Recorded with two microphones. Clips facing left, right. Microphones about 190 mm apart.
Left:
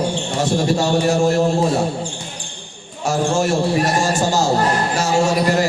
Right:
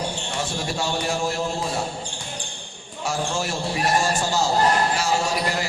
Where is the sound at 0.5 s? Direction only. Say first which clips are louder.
Left 11 dB; 45° left (ahead or behind).